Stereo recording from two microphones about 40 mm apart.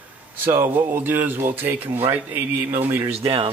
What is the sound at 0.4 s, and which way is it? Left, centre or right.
Speech, right.